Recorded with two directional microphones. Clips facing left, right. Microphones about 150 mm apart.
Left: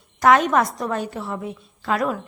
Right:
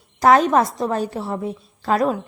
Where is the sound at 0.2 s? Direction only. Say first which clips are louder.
Right 2 dB; 35° right (ahead or behind).